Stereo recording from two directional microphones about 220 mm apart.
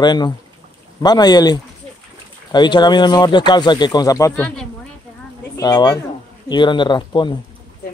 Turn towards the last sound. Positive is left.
turn(degrees=20)  # may be behind; listen again after turning